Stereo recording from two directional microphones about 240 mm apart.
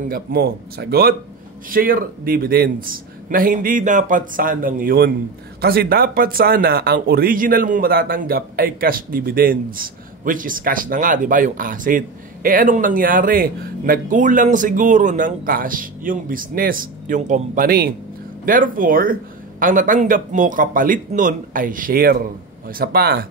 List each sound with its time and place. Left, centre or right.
0.1 s speech: right